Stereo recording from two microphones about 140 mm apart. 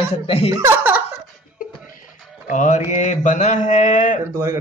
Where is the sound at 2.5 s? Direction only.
65° left (ahead or behind).